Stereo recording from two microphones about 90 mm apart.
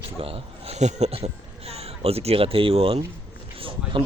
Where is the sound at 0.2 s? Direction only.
90° right.